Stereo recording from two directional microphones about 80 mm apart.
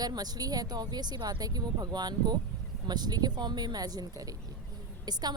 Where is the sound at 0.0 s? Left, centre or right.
Right.